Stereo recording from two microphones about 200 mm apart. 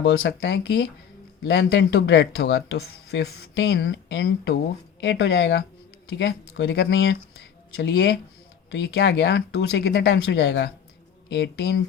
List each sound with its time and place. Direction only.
0.0 s speech: 60° left (ahead or behind)